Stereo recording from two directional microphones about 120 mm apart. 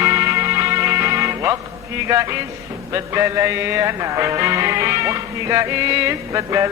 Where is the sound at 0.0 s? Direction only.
25° right (ahead or behind).